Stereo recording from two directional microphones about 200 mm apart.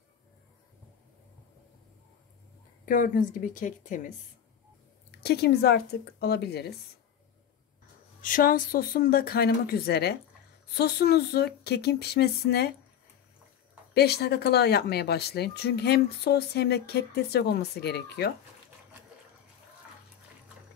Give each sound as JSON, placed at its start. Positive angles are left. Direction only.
{"t": 2.8, "sound": "a woman's voice", "side_deg": 45}
{"t": 5.2, "sound": "speech", "side_deg": 55}
{"t": 8.2, "sound": "speech", "side_deg": 45}
{"t": 13.9, "sound": "speech", "side_deg": 55}